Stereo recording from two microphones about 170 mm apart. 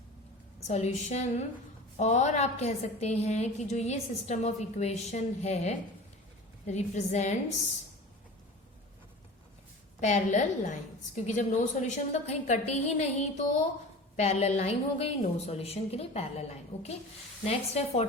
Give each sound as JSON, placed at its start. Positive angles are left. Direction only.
{"t": 0.7, "sound": "a woman's voice", "side_deg": 40}
{"t": 10.0, "sound": "a woman's voice", "side_deg": 40}